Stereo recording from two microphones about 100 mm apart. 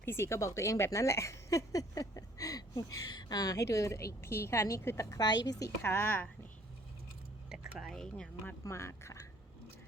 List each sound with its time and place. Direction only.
0.0 s speech: 25° left (ahead or behind)
7.5 s speech: 10° right (ahead or behind)
8.6 s speech: 30° left (ahead or behind)